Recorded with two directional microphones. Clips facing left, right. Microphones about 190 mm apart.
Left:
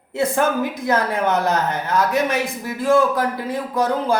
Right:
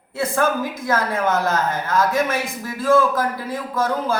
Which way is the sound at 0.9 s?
20° left (ahead or behind).